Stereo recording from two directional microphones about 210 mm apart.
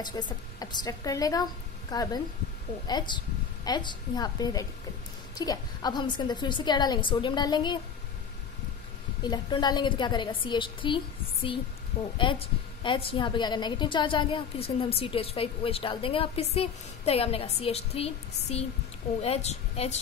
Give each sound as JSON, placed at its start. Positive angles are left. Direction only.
{"t": 0.0, "sound": "a woman's voice", "side_deg": 20}
{"t": 9.2, "sound": "a woman's voice", "side_deg": 20}
{"t": 12.2, "sound": "a woman's voice", "side_deg": 25}